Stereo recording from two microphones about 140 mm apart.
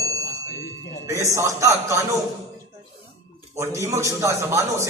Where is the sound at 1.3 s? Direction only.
20° right (ahead or behind).